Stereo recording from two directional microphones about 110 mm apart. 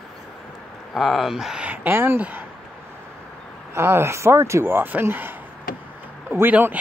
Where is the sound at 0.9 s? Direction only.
Centre (ahead or behind); by 2.4 s 15° right (ahead or behind).